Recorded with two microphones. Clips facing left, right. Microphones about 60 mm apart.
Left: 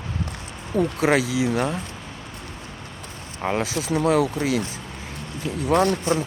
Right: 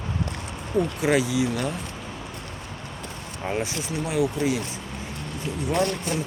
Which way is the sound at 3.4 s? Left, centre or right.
Left.